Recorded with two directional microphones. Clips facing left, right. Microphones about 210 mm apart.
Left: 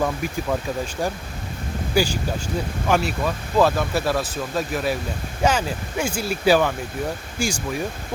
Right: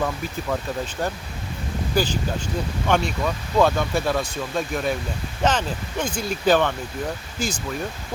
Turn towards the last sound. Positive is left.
turn(degrees=10)  # may be behind; listen again after turning